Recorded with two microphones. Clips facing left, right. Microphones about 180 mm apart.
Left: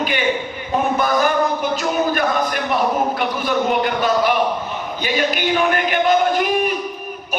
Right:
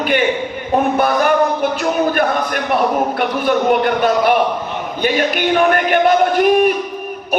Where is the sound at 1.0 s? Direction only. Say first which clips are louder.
Right 2 dB; 60° right (ahead or behind).